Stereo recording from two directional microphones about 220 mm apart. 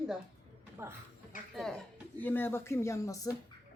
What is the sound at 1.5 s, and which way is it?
Speech, centre (ahead or behind).